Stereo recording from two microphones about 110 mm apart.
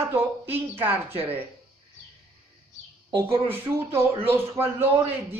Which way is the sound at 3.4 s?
20° right (ahead or behind).